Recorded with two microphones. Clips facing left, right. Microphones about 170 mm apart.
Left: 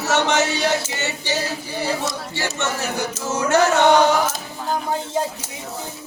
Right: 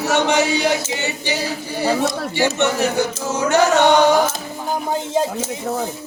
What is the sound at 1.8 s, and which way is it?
Speech, 50° right (ahead or behind).